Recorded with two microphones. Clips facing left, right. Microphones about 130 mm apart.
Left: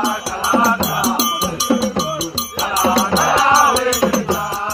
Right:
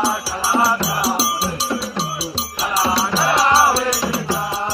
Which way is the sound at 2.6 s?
Centre (ahead or behind).